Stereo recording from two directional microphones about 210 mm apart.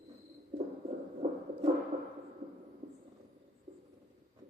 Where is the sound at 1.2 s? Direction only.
35° right (ahead or behind).